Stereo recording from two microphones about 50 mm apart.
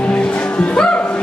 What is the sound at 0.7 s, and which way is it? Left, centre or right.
Music, centre.